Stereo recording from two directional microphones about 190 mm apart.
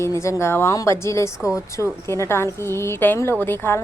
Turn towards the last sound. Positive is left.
turn(degrees=10)  # may be behind; listen again after turning